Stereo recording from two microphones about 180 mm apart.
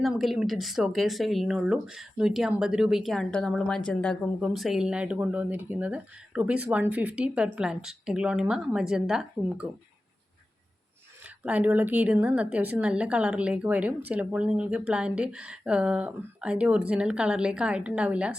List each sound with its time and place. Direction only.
0.0 s speech: centre (ahead or behind)
11.4 s speech: 10° right (ahead or behind)